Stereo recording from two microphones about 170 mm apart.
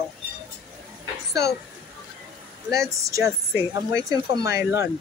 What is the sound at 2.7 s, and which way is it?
Speech, 20° right (ahead or behind).